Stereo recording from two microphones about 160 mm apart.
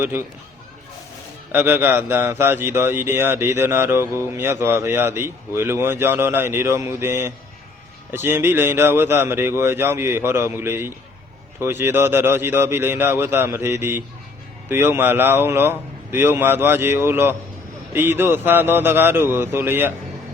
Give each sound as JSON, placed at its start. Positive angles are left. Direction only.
{"t": 0.0, "sound": "speech", "side_deg": -15}
{"t": 1.5, "sound": "speech", "side_deg": -15}